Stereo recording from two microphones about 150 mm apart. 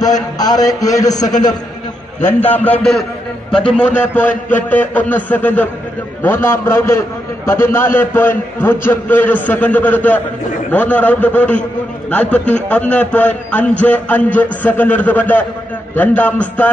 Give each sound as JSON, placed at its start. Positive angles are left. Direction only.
{"t": 0.0, "sound": "a man's voice", "side_deg": 25}
{"t": 2.4, "sound": "a man's voice", "side_deg": 10}